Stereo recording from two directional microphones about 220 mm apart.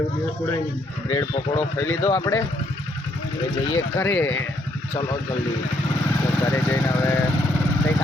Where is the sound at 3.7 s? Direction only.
10° left (ahead or behind).